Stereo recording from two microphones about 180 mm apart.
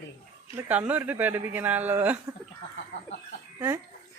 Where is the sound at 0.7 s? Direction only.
10° right (ahead or behind).